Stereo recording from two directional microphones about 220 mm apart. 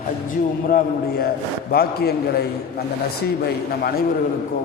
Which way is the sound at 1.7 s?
45° left (ahead or behind).